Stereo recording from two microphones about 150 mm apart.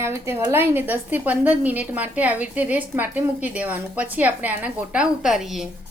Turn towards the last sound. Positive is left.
turn(degrees=0)  # may be behind; listen again after turning